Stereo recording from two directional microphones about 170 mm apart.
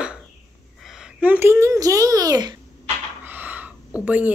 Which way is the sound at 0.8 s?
Centre (ahead or behind).